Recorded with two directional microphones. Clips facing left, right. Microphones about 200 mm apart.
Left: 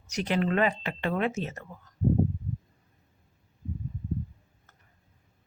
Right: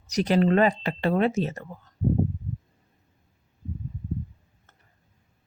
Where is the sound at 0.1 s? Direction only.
40° right (ahead or behind).